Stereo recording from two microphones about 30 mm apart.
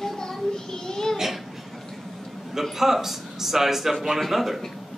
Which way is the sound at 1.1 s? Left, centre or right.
Centre.